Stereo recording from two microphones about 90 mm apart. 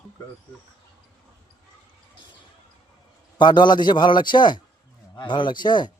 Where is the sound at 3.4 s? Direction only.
60° left (ahead or behind).